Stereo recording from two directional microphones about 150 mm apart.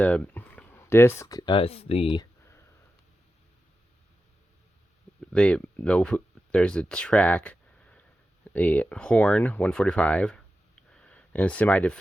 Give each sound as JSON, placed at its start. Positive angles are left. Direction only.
{"t": 0.0, "sound": "speech", "side_deg": 10}
{"t": 5.3, "sound": "speech", "side_deg": 5}
{"t": 10.9, "sound": "a sound", "side_deg": 5}